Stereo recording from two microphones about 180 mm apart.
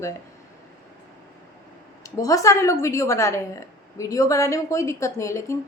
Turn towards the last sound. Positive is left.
turn(degrees=15)  # may be behind; listen again after turning